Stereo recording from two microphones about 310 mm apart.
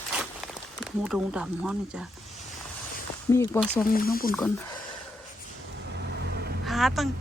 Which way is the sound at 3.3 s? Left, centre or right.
Centre.